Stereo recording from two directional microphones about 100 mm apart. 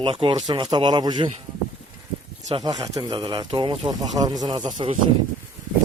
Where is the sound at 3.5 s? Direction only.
60° right (ahead or behind).